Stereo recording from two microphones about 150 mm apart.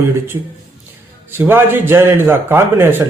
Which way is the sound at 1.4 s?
15° right (ahead or behind).